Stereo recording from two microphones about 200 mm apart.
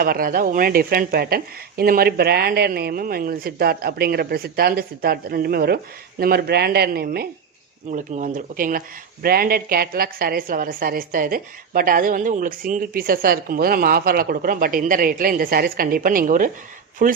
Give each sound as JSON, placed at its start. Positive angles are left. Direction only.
{"t": 0.0, "sound": "speech", "side_deg": -45}
{"t": 7.9, "sound": "speech", "side_deg": -40}